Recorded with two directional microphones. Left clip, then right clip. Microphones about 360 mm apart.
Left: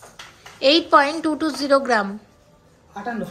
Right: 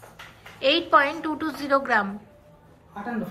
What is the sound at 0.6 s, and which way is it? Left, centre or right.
A woman's voice, centre.